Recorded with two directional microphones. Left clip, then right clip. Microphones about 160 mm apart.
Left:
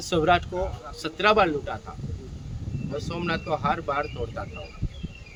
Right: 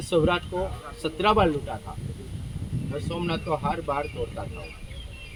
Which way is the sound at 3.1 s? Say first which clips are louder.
Even; 20° left (ahead or behind).